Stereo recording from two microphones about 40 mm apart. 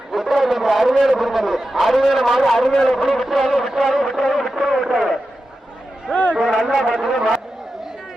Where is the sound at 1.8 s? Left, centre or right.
Centre.